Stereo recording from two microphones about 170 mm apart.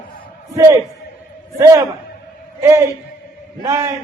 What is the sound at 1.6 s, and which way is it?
Mantra, 20° right (ahead or behind).